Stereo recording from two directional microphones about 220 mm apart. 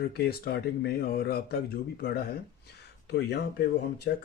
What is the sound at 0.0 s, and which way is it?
Speech, 45° left (ahead or behind).